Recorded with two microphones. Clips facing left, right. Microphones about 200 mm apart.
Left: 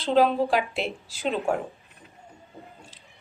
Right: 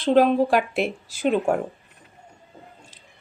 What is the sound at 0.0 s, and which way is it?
A woman's voice, 55° right (ahead or behind).